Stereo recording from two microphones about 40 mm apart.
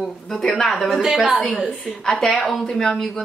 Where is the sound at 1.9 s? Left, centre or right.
Centre.